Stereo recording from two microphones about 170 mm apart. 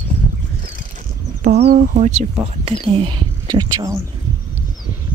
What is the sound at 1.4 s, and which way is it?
Speech, 40° right (ahead or behind).